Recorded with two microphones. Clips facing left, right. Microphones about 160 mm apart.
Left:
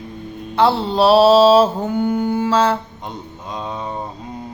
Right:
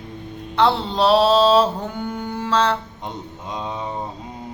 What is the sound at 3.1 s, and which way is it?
Mantra, 20° right (ahead or behind).